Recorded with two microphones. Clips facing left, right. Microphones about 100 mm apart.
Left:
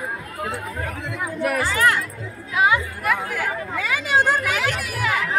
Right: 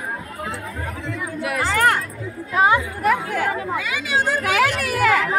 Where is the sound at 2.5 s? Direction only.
35° right (ahead or behind).